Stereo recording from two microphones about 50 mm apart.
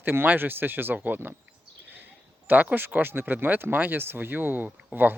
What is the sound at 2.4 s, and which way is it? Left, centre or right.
Speech, right.